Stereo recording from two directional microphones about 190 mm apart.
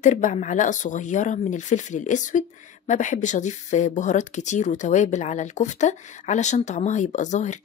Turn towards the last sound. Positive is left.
turn(degrees=40)  # may be behind; listen again after turning